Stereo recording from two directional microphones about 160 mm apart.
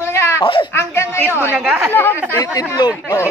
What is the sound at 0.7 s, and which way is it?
Speech, 15° left (ahead or behind).